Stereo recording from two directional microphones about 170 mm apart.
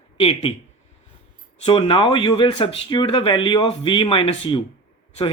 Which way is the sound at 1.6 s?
30° left (ahead or behind).